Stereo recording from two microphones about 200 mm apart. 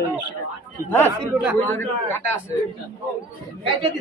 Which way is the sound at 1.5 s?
10° left (ahead or behind).